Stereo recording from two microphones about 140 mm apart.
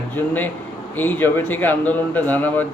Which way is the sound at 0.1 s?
15° left (ahead or behind).